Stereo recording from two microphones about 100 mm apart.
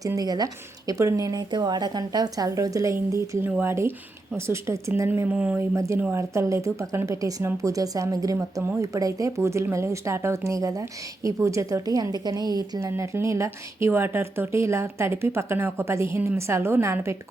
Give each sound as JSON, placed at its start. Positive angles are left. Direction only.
{"t": 0.2, "sound": "speech", "side_deg": -40}
{"t": 5.7, "sound": "speech", "side_deg": -30}